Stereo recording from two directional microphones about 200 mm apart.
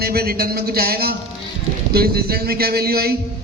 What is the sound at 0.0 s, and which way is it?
A man's voice, 50° right (ahead or behind).